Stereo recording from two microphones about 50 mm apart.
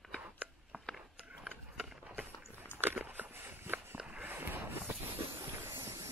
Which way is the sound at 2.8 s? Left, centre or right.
Right.